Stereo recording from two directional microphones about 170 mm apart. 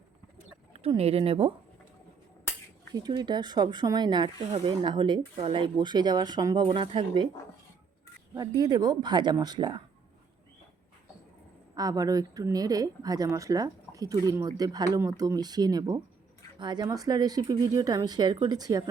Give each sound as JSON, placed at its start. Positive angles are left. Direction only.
{"t": 0.7, "sound": "speech", "side_deg": -35}
{"t": 2.9, "sound": "speech", "side_deg": -25}
{"t": 8.4, "sound": "speech", "side_deg": -25}
{"t": 11.7, "sound": "speech", "side_deg": -20}